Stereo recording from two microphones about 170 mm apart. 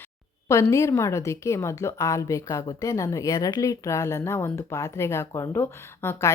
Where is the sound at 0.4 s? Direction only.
15° left (ahead or behind).